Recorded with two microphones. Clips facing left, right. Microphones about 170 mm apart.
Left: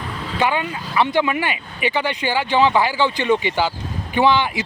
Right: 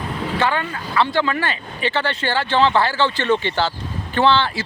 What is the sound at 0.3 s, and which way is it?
Speech, 15° left (ahead or behind).